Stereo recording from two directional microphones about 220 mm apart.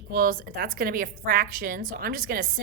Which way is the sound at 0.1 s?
40° right (ahead or behind).